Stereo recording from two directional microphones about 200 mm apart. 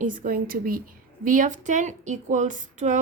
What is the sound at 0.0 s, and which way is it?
A woman's voice, 40° right (ahead or behind).